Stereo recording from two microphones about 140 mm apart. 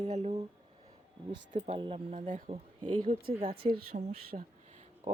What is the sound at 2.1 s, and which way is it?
Speech, 60° right (ahead or behind).